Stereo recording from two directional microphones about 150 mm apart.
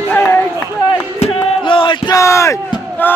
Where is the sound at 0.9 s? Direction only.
35° left (ahead or behind).